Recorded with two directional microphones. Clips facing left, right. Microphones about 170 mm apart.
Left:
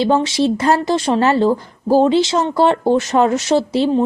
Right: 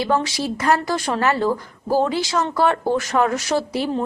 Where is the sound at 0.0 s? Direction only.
25° left (ahead or behind).